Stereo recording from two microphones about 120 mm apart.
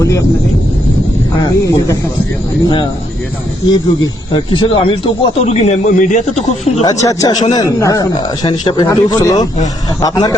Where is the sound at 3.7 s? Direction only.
40° left (ahead or behind).